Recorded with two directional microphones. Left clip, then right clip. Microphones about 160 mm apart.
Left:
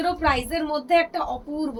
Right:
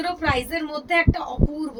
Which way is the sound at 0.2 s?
20° right (ahead or behind).